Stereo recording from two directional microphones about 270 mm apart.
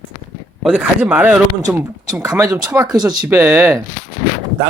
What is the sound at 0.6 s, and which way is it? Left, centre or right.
Speech, centre.